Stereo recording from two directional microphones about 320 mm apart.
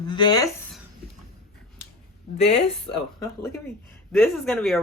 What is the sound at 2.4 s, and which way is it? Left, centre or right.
Speech, centre.